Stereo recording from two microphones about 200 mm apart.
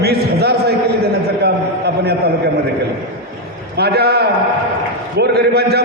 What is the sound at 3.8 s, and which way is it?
A man's voice, 55° right (ahead or behind).